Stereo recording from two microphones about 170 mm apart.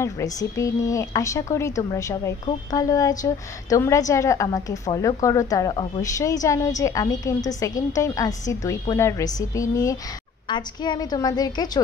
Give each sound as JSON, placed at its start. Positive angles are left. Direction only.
{"t": 0.0, "sound": "speech", "side_deg": 20}